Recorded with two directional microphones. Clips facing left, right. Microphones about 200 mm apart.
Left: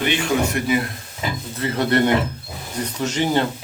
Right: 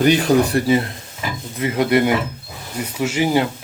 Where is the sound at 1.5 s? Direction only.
15° right (ahead or behind).